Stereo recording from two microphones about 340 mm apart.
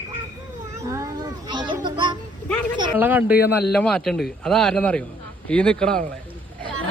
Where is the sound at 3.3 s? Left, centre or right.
Left.